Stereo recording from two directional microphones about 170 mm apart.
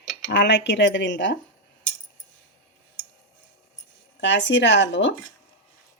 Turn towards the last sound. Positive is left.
turn(degrees=90)